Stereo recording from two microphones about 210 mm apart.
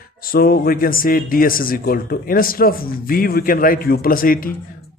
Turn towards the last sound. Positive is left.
turn(degrees=40)  # may be behind; listen again after turning